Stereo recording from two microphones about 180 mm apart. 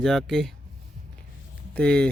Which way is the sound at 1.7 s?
5° left (ahead or behind).